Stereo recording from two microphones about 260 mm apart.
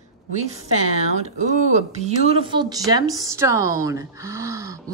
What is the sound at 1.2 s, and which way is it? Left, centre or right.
A woman's voice, right.